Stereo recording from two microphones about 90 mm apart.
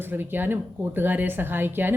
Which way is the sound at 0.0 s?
25° right (ahead or behind).